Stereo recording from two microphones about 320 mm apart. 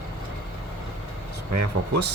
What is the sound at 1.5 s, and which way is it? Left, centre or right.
Speech, right.